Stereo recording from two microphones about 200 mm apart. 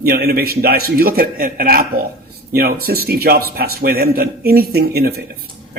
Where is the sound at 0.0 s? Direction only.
50° right (ahead or behind).